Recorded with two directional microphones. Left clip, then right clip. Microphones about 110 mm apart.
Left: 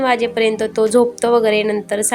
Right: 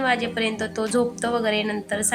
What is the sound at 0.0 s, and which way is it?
A woman's voice, 40° left (ahead or behind).